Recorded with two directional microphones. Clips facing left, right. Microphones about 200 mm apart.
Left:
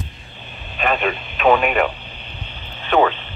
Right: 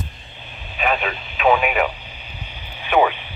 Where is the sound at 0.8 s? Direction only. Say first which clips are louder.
Left 2 dB; 5° right (ahead or behind).